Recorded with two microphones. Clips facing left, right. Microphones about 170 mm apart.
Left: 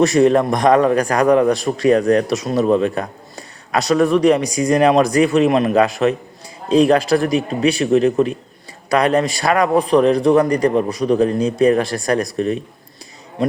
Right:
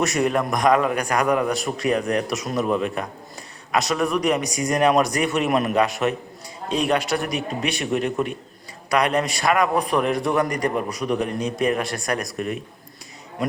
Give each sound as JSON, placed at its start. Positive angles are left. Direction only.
{"t": 0.0, "sound": "a man's voice", "side_deg": 30}